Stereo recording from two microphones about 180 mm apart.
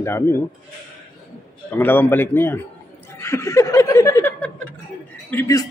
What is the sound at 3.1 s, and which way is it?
Snicker, 15° left (ahead or behind).